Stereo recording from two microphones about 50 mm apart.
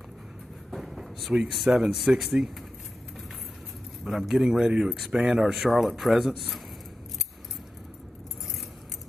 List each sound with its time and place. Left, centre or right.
0.7 s a sound: centre
1.3 s a man's voice: centre
4.0 s a man's voice: centre
5.4 s speech: centre